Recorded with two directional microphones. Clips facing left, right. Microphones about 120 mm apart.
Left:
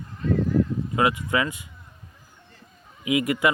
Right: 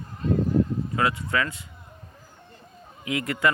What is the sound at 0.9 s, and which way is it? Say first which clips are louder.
Speech: left 3 dB; 15° left (ahead or behind).